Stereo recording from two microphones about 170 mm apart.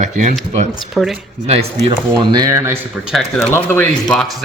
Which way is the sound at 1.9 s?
20° right (ahead or behind).